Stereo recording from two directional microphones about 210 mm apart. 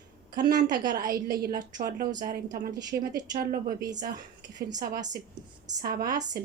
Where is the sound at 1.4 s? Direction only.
40° right (ahead or behind).